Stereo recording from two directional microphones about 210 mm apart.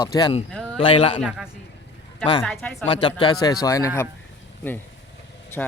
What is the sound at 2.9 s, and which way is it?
Speech, 25° left (ahead or behind).